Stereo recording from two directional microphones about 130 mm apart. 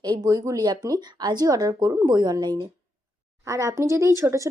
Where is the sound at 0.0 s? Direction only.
30° right (ahead or behind).